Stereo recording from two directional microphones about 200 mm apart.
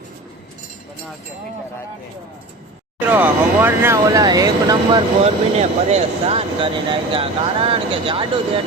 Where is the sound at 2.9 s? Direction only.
10° right (ahead or behind).